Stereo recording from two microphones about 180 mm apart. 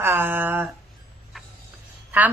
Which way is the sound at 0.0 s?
10° right (ahead or behind).